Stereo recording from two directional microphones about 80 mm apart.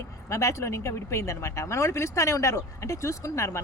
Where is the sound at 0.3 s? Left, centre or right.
Left.